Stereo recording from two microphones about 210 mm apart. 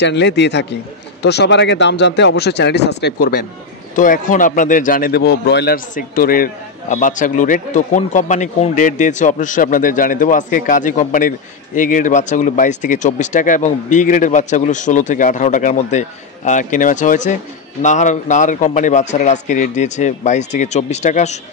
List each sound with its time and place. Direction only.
0.0 s a man's voice: 55° left (ahead or behind); by 21.4 s 35° left (ahead or behind)